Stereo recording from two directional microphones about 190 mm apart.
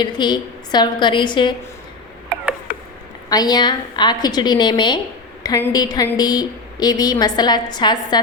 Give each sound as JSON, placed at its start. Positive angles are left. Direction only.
{"t": 0.0, "sound": "a woman's voice", "side_deg": 25}
{"t": 3.2, "sound": "a woman's voice", "side_deg": 20}